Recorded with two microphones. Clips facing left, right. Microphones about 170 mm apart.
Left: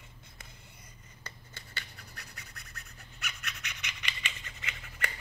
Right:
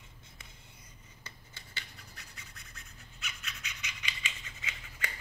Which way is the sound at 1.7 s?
65° left (ahead or behind).